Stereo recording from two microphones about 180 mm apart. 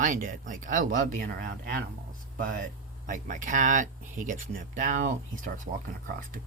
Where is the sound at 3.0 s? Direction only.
45° right (ahead or behind).